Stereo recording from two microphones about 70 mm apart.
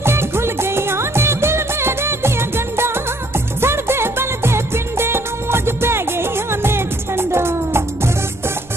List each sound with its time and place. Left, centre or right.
0.0 s music of bollywood: right